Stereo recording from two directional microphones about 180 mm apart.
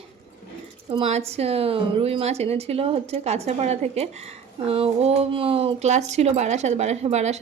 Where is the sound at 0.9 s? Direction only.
35° right (ahead or behind).